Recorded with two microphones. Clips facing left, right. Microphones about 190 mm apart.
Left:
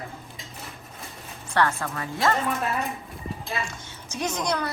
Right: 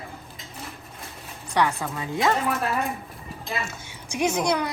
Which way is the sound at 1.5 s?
15° right (ahead or behind).